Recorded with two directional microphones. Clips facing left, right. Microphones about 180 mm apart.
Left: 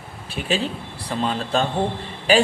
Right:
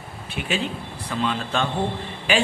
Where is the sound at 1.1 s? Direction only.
35° left (ahead or behind).